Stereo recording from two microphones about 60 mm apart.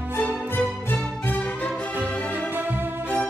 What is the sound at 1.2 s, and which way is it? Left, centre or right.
Music, left.